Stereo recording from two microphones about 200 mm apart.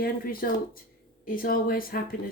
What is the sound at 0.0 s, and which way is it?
Speech, 45° left (ahead or behind).